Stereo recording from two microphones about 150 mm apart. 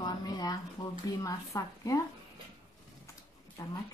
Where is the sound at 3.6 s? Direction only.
20° left (ahead or behind).